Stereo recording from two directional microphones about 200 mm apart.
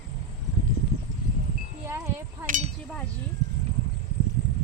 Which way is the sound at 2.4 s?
40° right (ahead or behind).